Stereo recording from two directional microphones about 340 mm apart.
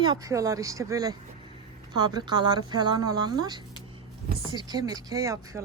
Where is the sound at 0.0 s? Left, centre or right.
Centre.